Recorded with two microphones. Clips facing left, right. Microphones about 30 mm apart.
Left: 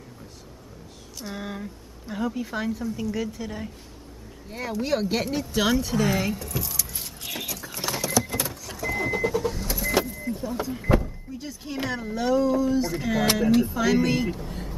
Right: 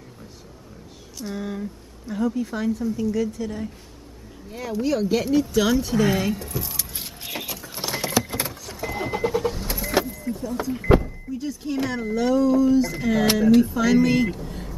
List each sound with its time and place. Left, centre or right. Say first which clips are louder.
1.1 s a woman's voice: right 4 dB; centre
5.8 s speech: right 3 dB; centre
6.6 s keys jangling: even; right
7.3 s a sound: right 2 dB; centre
8.3 s vehicle: right 1 dB; right
10.2 s vehicle: right 2 dB; centre
10.9 s power windows: right 5 dB; right
11.3 s a woman's voice: right 6 dB; centre